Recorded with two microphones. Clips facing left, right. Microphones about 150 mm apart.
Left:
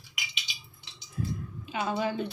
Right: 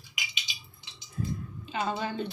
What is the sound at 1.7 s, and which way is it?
Speech, 5° left (ahead or behind).